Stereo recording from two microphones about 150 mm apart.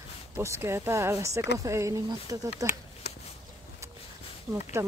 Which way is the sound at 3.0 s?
90° left.